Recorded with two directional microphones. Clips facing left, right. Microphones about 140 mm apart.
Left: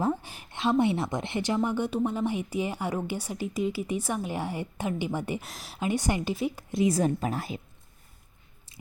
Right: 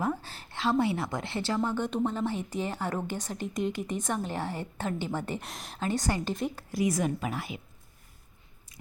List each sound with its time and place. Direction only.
0.0 s a woman's voice: 20° left (ahead or behind)
5.4 s speech: centre (ahead or behind)
5.8 s a woman's voice: 15° left (ahead or behind)
6.7 s a woman's voice: 25° left (ahead or behind)